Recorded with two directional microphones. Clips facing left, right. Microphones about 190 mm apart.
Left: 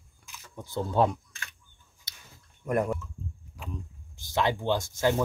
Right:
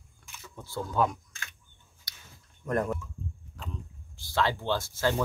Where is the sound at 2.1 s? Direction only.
20° left (ahead or behind).